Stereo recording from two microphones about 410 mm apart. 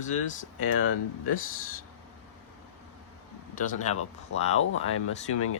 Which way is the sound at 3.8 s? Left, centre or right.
Centre.